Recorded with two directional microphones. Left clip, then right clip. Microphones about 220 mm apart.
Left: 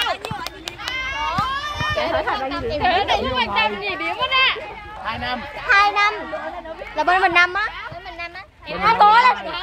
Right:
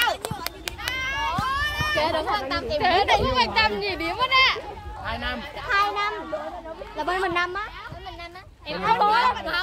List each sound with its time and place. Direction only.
0.0 s run: 40° right (ahead or behind)
1.5 s a child's voice: 45° right (ahead or behind)
5.0 s a child's voice: 50° left (ahead or behind)
8.8 s a child's voice: 45° left (ahead or behind)